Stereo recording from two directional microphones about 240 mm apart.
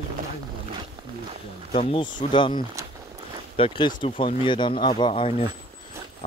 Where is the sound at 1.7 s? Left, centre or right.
Left.